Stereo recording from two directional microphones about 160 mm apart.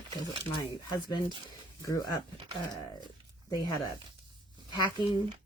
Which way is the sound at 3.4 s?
25° left (ahead or behind).